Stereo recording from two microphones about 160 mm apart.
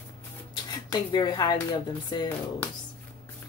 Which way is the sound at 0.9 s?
25° left (ahead or behind).